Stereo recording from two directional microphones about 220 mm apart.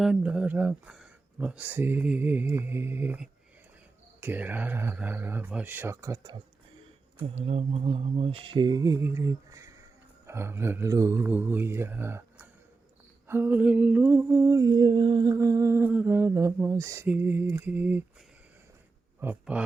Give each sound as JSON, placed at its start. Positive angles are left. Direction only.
{"t": 0.0, "sound": "humming", "side_deg": -5}
{"t": 7.3, "sound": "speech", "side_deg": -25}
{"t": 10.2, "sound": "humming", "side_deg": -10}
{"t": 19.2, "sound": "humming", "side_deg": -5}